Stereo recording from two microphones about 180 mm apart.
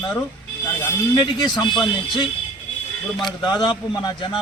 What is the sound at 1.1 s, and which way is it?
Speech, 25° left (ahead or behind).